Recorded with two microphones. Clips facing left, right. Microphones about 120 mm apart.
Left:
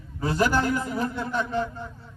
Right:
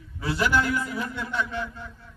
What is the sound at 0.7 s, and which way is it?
Speech, 25° left (ahead or behind).